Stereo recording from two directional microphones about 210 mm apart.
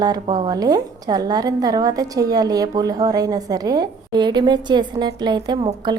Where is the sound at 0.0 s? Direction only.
20° right (ahead or behind).